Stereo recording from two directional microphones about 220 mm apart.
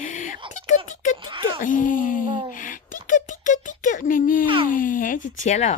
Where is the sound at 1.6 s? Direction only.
35° left (ahead or behind).